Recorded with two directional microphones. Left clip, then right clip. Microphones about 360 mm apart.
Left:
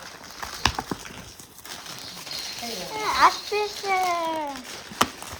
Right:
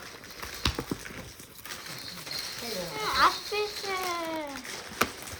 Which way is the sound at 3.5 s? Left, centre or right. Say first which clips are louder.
Left 5 dB; centre.